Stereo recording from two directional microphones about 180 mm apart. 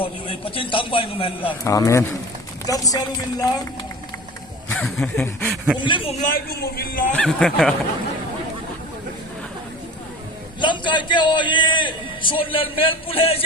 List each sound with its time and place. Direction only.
0.0 s a man's voice: 30° left (ahead or behind)
1.6 s a man's voice: 15° left (ahead or behind)
4.7 s speech: 5° left (ahead or behind)
5.8 s a man's voice: 25° left (ahead or behind)
6.1 s a man's voice: 50° left (ahead or behind)
7.1 s speech: 5° left (ahead or behind)
10.6 s a man's voice: 25° left (ahead or behind)